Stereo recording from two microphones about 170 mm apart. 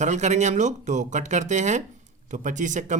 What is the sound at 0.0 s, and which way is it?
Speech, 45° right (ahead or behind).